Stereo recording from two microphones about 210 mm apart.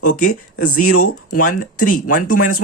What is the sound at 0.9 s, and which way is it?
Speech, 90° left.